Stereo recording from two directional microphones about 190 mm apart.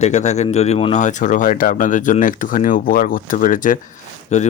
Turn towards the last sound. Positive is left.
turn(degrees=40)  # may be behind; listen again after turning